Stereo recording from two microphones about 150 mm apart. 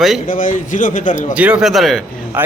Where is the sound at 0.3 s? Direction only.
60° left (ahead or behind).